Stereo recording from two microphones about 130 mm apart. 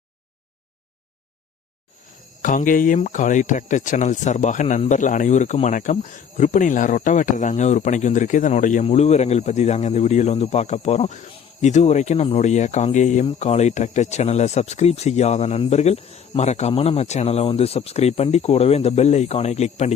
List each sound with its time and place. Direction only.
2.4 s speech: 90° left; by 8.8 s 70° left (ahead or behind)
8.8 s speech: 60° left (ahead or behind)
13.2 s speech: 55° left (ahead or behind)